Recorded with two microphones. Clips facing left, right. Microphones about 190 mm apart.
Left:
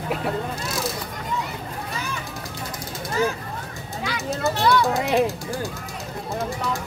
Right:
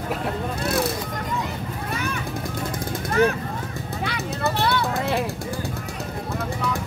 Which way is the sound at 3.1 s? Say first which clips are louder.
Right 4 dB; 60° right (ahead or behind).